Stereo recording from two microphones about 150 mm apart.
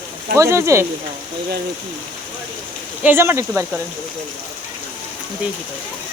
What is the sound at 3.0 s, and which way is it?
Speech, 15° right (ahead or behind).